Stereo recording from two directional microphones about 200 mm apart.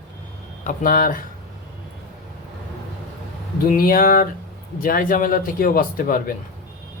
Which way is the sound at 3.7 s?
45° left (ahead or behind).